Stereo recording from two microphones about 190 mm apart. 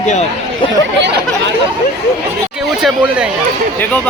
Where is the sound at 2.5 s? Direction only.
5° right (ahead or behind).